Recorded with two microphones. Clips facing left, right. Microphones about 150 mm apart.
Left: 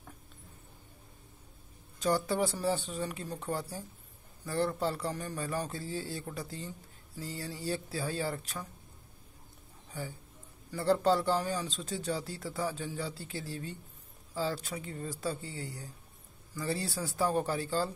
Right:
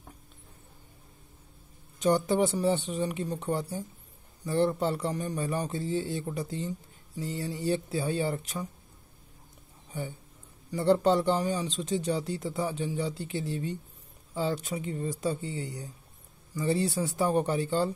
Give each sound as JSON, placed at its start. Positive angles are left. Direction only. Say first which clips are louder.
{"t": 2.0, "sound": "a man's voice", "louder": "right 5 dB", "side_deg": -20}
{"t": 2.6, "sound": "speech", "louder": "right 5 dB", "side_deg": 0}
{"t": 2.9, "sound": "a man's voice", "louder": "right 6 dB", "side_deg": -20}
{"t": 10.7, "sound": "a man's voice", "louder": "right 4 dB", "side_deg": -20}